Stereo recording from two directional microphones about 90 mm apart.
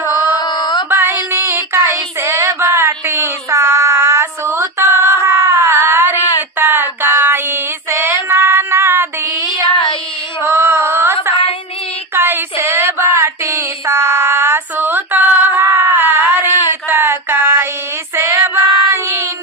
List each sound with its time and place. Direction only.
0.1 s mantra: 50° left (ahead or behind)
0.9 s a sound: 25° right (ahead or behind)
1.3 s child singing: 30° right (ahead or behind)
6.6 s a sound: 25° right (ahead or behind)
7.0 s child singing: 25° right (ahead or behind)
9.5 s child singing: 60° left (ahead or behind)
10.4 s singing: 30° right (ahead or behind)
12.1 s a sound: 25° right (ahead or behind)
16.9 s child singing: 25° right (ahead or behind)